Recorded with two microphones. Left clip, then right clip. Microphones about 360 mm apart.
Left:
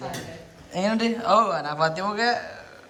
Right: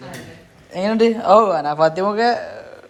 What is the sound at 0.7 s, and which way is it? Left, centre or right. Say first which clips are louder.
A man's voice: right 8 dB; centre.